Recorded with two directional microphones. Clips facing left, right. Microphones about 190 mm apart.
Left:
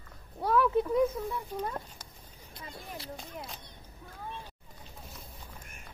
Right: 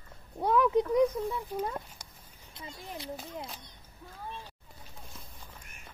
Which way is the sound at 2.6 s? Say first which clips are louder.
Right 1 dB; 25° right (ahead or behind).